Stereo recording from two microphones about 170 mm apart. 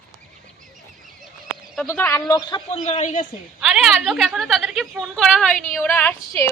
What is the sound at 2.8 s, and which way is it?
Speech, 45° left (ahead or behind).